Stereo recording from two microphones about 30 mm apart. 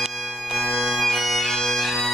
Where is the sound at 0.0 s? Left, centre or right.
Centre.